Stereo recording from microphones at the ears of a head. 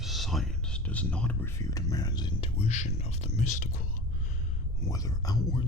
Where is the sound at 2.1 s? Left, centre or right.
Left.